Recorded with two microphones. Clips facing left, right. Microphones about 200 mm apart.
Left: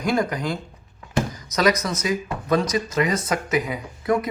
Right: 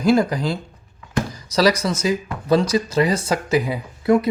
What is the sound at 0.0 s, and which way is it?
Speech, 30° right (ahead or behind).